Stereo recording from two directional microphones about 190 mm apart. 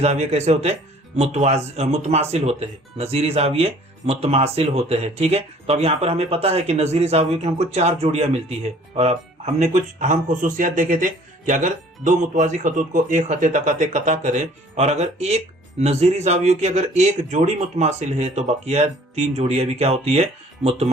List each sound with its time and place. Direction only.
0.0 s speech: 35° right (ahead or behind)